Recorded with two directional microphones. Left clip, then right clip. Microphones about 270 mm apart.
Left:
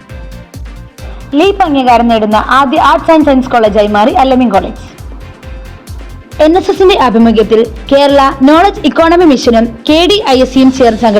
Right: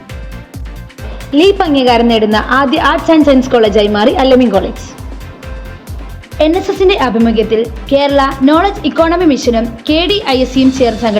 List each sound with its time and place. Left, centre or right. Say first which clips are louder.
1.3 s a woman's voice: left 1 dB; left
6.3 s a woman's voice: left 4 dB; left